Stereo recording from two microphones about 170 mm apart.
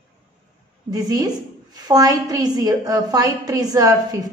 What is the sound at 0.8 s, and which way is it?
A woman's voice, 25° right (ahead or behind).